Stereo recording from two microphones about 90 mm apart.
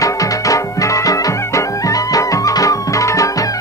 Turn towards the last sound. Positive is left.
turn(degrees=35)  # may be behind; listen again after turning